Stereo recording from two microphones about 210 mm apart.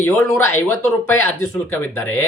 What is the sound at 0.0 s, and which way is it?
Speech, 10° left (ahead or behind).